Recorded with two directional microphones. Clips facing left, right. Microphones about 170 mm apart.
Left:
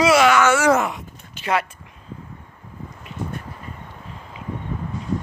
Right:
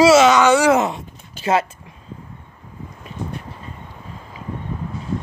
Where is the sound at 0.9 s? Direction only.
30° right (ahead or behind).